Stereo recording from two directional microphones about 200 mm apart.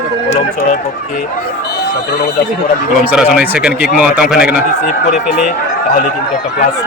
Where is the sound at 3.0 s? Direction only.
5° right (ahead or behind).